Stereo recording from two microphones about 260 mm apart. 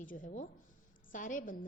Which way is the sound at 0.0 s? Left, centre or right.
Left.